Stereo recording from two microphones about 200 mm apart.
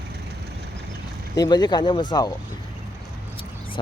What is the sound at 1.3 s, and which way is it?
Speech, 20° left (ahead or behind).